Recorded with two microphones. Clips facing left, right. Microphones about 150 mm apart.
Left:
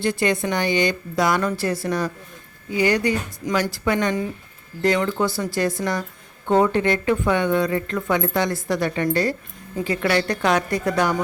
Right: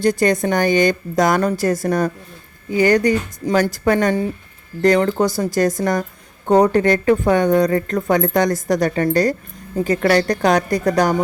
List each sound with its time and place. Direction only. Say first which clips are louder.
0.0 s a woman's voice: right 5 dB; 40° right (ahead or behind)